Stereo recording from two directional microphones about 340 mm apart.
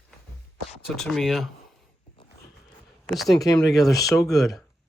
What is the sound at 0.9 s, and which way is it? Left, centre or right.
Speech, centre.